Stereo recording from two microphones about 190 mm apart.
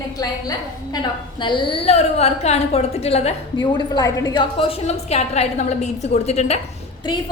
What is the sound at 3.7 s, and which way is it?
A woman's voice, 20° left (ahead or behind).